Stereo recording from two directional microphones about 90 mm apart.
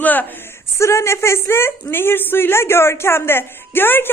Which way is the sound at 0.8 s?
30° left (ahead or behind).